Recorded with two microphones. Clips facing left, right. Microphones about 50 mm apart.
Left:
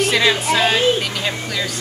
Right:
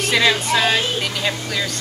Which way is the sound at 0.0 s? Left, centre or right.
Centre.